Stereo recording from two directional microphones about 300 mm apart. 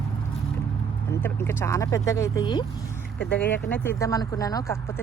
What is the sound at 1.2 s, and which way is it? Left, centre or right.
Speech, centre.